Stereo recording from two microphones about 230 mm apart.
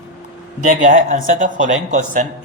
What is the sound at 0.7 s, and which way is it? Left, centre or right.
Speech, right.